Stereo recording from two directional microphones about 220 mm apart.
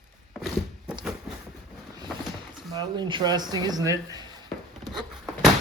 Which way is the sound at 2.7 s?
20° right (ahead or behind).